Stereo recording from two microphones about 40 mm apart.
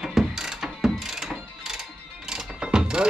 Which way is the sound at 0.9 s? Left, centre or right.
Centre.